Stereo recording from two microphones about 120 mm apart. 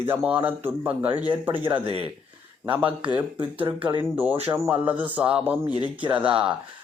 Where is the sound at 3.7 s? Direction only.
40° right (ahead or behind).